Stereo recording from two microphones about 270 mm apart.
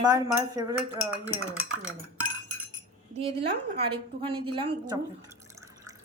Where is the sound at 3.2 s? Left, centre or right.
Right.